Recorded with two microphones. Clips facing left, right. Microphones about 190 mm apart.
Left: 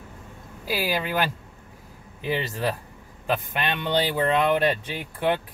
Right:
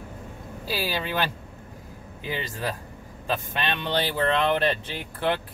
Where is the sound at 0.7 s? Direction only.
15° left (ahead or behind).